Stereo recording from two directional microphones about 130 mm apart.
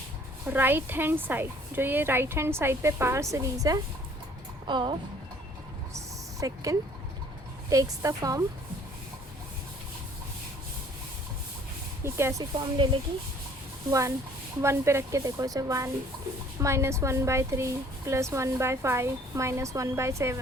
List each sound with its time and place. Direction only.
0.4 s a woman's voice: 15° right (ahead or behind)
4.6 s speech: 40° right (ahead or behind)
6.4 s speech: 25° right (ahead or behind)
12.0 s speech: 20° right (ahead or behind)
14.6 s speech: 20° right (ahead or behind)